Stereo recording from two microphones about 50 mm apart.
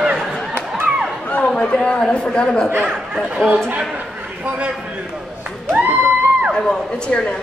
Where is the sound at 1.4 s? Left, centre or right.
Centre.